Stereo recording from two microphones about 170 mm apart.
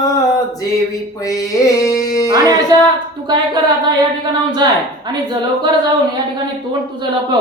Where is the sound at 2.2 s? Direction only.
20° right (ahead or behind).